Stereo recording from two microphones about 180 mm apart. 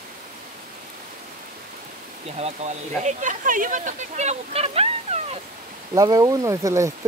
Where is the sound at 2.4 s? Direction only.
35° right (ahead or behind).